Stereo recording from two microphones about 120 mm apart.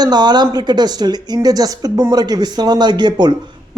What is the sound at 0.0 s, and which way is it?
A man's voice, 35° right (ahead or behind).